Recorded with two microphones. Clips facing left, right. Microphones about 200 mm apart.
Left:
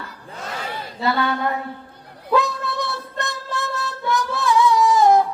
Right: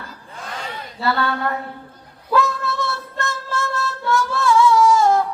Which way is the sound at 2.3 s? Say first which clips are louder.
Right 1 dB; 15° left (ahead or behind).